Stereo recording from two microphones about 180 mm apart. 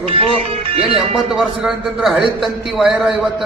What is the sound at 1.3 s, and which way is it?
A man's voice, centre (ahead or behind).